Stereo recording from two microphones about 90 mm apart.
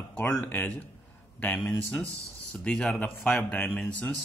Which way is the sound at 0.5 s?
15° left (ahead or behind).